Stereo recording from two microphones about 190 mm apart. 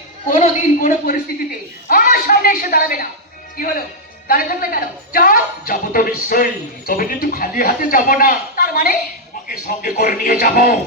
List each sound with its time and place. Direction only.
0.3 s a man's voice: 40° left (ahead or behind)
4.3 s a woman's voice: 50° left (ahead or behind)